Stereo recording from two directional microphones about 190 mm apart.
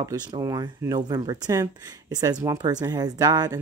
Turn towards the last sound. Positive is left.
turn(degrees=-20)  # may be behind; listen again after turning